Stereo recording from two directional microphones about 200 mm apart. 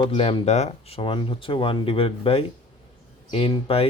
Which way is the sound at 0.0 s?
30° left (ahead or behind).